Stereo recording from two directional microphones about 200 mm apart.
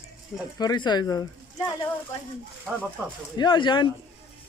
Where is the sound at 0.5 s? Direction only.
20° left (ahead or behind).